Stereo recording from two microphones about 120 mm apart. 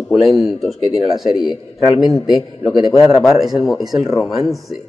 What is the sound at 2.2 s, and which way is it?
Speech, 40° left (ahead or behind).